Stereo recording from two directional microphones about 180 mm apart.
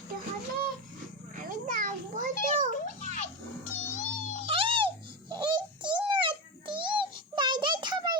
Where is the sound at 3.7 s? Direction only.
45° left (ahead or behind).